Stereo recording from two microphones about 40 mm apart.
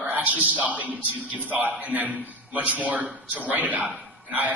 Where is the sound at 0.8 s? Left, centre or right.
Left.